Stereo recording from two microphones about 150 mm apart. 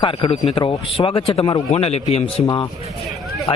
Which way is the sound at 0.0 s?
40° left (ahead or behind).